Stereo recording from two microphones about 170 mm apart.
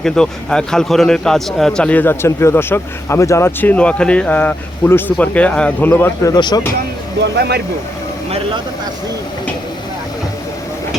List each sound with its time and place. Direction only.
0.0 s a man's voice: 5° left (ahead or behind)
6.3 s speech: 25° left (ahead or behind)
7.2 s speech: 75° right (ahead or behind)